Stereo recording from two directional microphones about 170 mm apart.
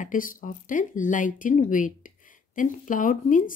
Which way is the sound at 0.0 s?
50° left (ahead or behind).